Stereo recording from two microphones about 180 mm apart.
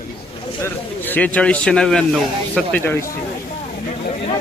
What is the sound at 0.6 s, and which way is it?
A man's voice, 10° left (ahead or behind).